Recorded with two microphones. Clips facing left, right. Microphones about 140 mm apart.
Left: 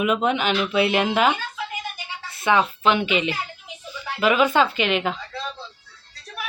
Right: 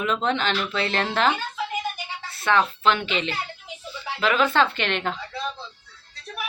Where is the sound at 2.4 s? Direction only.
10° left (ahead or behind).